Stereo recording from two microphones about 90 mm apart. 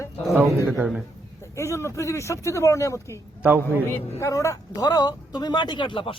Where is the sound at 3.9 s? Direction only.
30° left (ahead or behind).